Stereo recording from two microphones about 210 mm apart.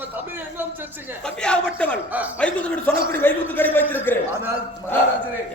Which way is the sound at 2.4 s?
5° left (ahead or behind).